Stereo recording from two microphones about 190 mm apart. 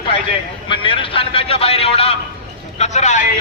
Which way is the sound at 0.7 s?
25° left (ahead or behind).